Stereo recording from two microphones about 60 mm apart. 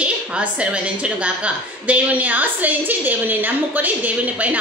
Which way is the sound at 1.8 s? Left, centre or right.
Right.